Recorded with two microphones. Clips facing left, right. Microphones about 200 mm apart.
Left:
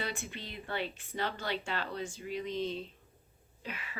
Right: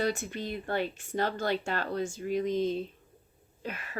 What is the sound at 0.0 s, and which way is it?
Speech, 45° right (ahead or behind).